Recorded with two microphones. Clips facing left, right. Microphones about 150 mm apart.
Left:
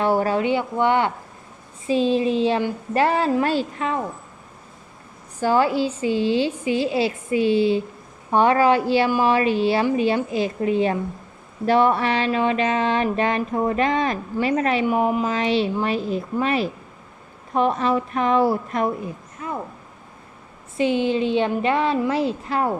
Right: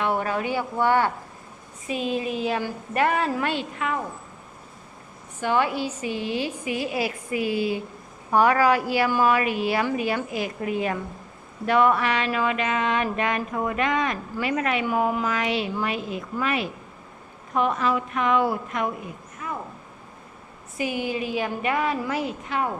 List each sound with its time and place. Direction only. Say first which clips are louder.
0.0 s a woman's voice: left 5 dB; 35° left (ahead or behind)
5.4 s a woman's voice: left 5 dB; 35° left (ahead or behind)
14.8 s speech: left 3 dB; 20° left (ahead or behind)
19.4 s a sound: left 3 dB; 30° left (ahead or behind)
20.7 s a woman's voice: left 7 dB; 25° left (ahead or behind)